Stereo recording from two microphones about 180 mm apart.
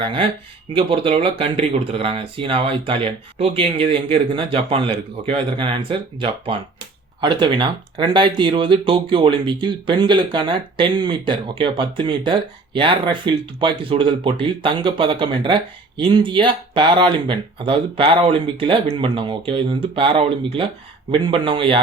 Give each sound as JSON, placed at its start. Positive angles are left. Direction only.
{"t": 0.0, "sound": "speech", "side_deg": -30}